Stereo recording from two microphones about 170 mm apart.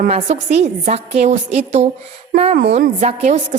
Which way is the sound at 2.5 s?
80° right.